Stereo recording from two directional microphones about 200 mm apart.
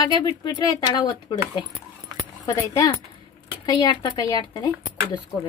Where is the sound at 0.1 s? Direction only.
20° left (ahead or behind).